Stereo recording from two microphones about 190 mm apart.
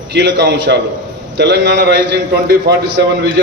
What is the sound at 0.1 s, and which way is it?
A man's voice, 65° right (ahead or behind).